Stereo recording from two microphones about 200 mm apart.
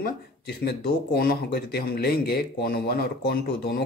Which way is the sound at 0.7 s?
50° left (ahead or behind).